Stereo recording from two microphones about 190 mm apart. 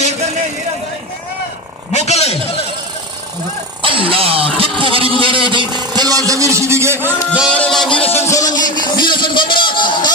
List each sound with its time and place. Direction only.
1.9 s a man's voice: 35° left (ahead or behind)
3.8 s music: 30° right (ahead or behind)
5.2 s a sound: 25° right (ahead or behind)
7.1 s music: 10° left (ahead or behind)
7.9 s music: 30° left (ahead or behind)
8.7 s a sound: 25° left (ahead or behind)